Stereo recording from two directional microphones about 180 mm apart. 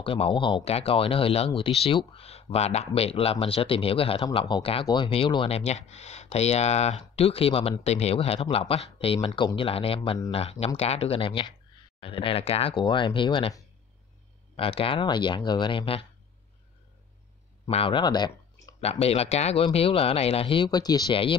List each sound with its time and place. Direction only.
0.0 s speech: 30° left (ahead or behind)
17.6 s speech: 30° left (ahead or behind)
18.8 s speech: 35° left (ahead or behind)